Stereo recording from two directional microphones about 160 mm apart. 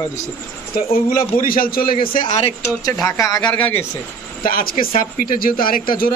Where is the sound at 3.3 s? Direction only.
10° left (ahead or behind).